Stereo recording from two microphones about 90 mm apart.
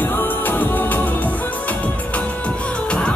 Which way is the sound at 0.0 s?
20° left (ahead or behind).